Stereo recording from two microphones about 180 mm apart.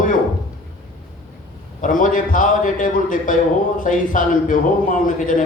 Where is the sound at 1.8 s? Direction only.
45° left (ahead or behind).